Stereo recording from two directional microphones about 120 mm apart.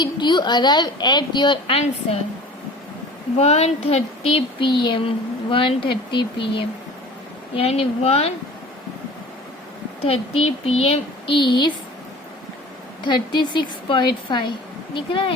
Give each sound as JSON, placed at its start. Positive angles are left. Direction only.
{"t": 0.0, "sound": "a woman's voice", "side_deg": 40}
{"t": 3.3, "sound": "speech", "side_deg": 60}
{"t": 10.0, "sound": "speech", "side_deg": 55}
{"t": 11.3, "sound": "a woman's voice", "side_deg": 40}
{"t": 13.1, "sound": "a woman's voice", "side_deg": 40}